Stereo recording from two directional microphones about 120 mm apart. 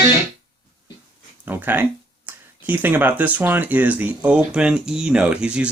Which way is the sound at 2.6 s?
15° right (ahead or behind).